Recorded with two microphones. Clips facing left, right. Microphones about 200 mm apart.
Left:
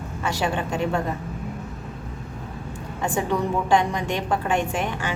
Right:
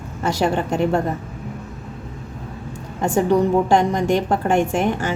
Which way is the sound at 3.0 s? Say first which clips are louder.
Right 7 dB; 40° right (ahead or behind).